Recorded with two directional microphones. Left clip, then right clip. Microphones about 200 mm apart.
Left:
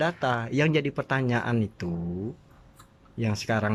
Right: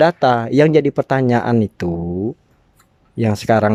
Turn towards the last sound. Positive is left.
turn(degrees=-35)  # may be behind; listen again after turning